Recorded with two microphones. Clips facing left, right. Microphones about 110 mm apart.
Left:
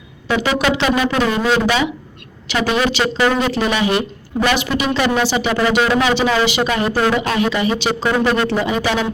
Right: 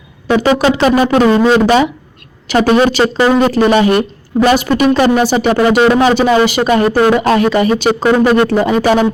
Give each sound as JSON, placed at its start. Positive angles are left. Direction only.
{"t": 0.3, "sound": "a man's voice", "side_deg": -40}